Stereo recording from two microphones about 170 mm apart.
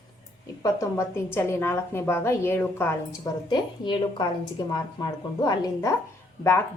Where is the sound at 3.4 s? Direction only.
25° left (ahead or behind).